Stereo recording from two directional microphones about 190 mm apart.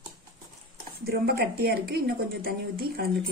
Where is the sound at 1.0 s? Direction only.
55° right (ahead or behind).